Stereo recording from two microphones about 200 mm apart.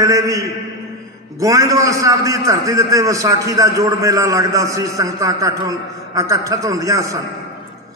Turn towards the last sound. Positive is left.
turn(degrees=-15)  # may be behind; listen again after turning